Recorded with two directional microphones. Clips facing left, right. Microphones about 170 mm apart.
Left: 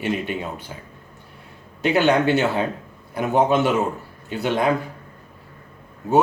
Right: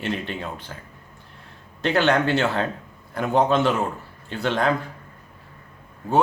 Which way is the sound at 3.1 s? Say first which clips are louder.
Left 1 dB; 15° left (ahead or behind).